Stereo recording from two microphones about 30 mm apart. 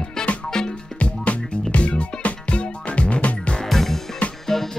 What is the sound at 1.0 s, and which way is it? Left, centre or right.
Music, left.